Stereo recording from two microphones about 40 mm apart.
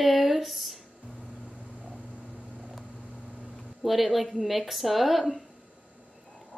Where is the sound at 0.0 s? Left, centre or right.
Centre.